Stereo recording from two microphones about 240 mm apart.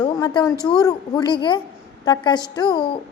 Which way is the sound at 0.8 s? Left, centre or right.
Centre.